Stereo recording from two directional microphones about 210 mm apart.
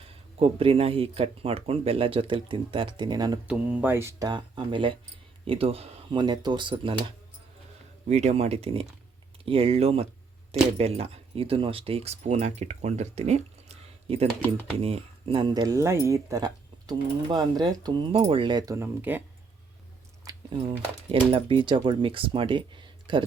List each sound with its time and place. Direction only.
0.3 s speech: 25° right (ahead or behind)
3.4 s speech: 5° right (ahead or behind); by 6.9 s 25° right (ahead or behind)
8.0 s speech: 30° right (ahead or behind); by 19.2 s 10° right (ahead or behind)
20.2 s speech: 25° right (ahead or behind)